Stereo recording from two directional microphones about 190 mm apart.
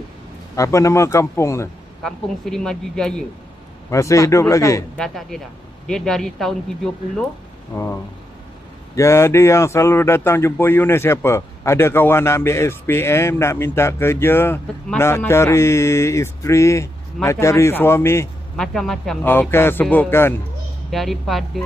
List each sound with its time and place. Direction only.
0.6 s speech: 15° left (ahead or behind)
2.0 s speech: 5° left (ahead or behind)
3.9 s speech: 15° left (ahead or behind)
4.9 s speech: centre (ahead or behind)
7.7 s speech: 15° left (ahead or behind)
18.6 s speech: centre (ahead or behind)
20.9 s speech: centre (ahead or behind)